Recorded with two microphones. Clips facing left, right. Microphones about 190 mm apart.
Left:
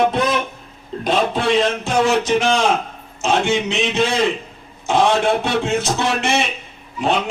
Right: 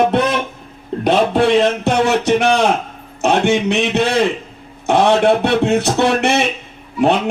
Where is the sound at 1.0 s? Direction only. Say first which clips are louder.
Right 5 dB; 65° right (ahead or behind).